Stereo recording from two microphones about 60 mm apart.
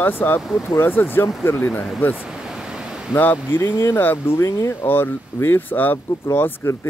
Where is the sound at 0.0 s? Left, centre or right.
Left.